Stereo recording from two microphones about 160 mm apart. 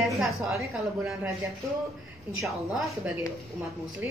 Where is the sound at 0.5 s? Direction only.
20° right (ahead or behind).